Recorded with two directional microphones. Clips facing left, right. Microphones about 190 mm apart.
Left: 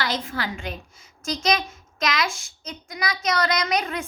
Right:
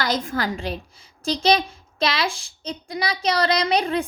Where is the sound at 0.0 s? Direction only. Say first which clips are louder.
Right 4 dB; 45° right (ahead or behind).